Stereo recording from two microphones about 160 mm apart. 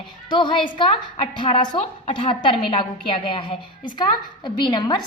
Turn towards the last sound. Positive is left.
turn(degrees=30)  # may be behind; listen again after turning